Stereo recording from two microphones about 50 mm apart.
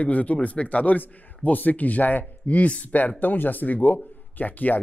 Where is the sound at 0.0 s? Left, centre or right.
Left.